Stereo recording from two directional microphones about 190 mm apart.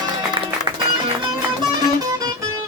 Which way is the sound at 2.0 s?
20° right (ahead or behind).